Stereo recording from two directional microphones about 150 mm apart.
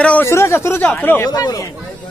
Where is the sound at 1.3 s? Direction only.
25° left (ahead or behind).